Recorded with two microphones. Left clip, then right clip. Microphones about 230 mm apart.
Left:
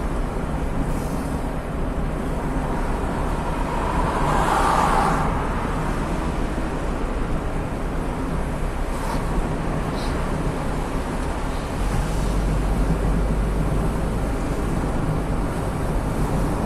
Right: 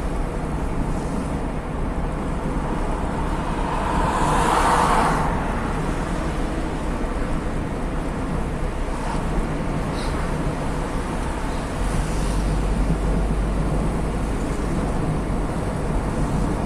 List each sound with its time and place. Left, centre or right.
4.6 s vehicle: right